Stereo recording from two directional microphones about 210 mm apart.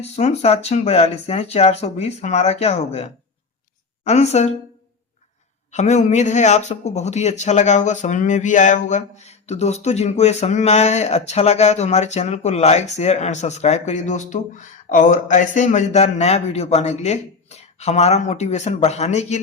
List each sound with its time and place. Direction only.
0.0 s a man's voice: 30° left (ahead or behind)
5.7 s a man's voice: 35° left (ahead or behind)